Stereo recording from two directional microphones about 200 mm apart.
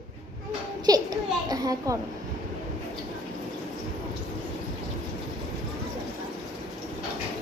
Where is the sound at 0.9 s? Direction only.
20° right (ahead or behind).